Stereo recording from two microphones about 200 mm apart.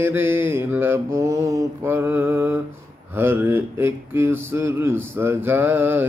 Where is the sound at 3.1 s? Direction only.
10° right (ahead or behind).